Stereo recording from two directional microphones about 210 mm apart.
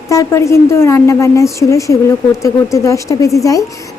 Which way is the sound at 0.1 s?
15° left (ahead or behind).